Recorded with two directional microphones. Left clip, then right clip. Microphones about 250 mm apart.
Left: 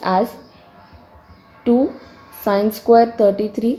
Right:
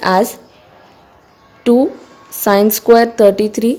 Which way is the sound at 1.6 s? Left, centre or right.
Right.